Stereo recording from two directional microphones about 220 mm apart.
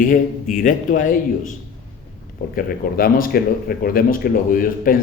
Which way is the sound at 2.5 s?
40° left (ahead or behind).